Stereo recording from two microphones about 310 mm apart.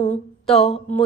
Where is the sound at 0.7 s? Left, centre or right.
Centre.